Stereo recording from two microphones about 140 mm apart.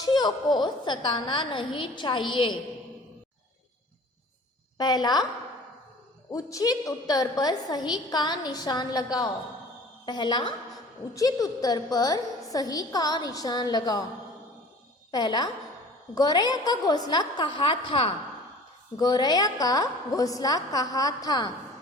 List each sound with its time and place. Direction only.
0.0 s a woman's voice: 30° left (ahead or behind)
4.8 s a woman's voice: 30° left (ahead or behind)
6.3 s a woman's voice: 25° left (ahead or behind)
15.1 s a woman's voice: 30° left (ahead or behind)
18.9 s a woman's voice: 30° left (ahead or behind)